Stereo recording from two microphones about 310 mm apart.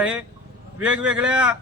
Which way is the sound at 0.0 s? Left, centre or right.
Centre.